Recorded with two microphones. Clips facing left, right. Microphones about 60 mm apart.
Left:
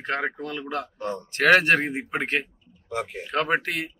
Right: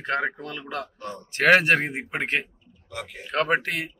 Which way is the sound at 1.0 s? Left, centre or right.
Left.